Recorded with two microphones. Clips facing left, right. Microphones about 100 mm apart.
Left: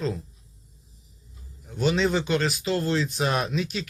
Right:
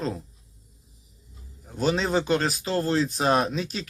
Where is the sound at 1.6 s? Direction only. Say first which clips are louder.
Left 1 dB; 35° right (ahead or behind).